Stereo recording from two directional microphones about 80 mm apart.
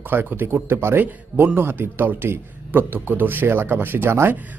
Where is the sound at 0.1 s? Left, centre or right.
Right.